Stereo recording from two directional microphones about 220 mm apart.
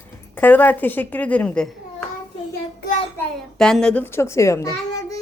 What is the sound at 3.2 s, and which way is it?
A child's voice, 5° left (ahead or behind).